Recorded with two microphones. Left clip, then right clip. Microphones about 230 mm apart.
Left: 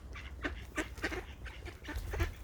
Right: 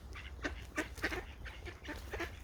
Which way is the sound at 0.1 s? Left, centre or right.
Centre.